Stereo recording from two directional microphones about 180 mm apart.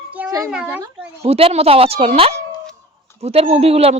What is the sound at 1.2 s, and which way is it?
Speech, 35° right (ahead or behind).